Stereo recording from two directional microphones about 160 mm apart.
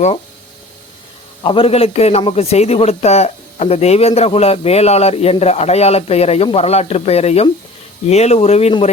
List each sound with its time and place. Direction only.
1.5 s a man's voice: 35° left (ahead or behind)